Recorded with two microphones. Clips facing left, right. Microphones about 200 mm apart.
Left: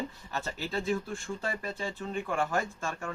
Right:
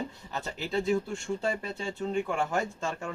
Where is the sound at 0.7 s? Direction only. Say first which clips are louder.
Right 5 dB; 25° right (ahead or behind).